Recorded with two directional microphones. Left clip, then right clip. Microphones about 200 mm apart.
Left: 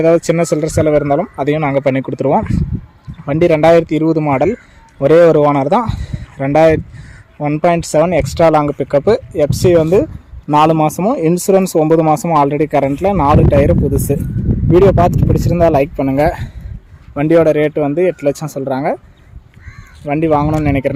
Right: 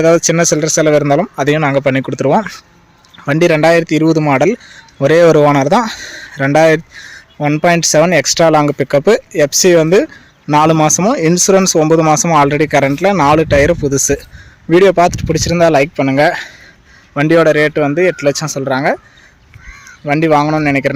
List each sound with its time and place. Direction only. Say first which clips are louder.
0.0 s a man's voice: right 2 dB; centre (ahead or behind)
20.1 s a man's voice: right 3 dB; centre (ahead or behind)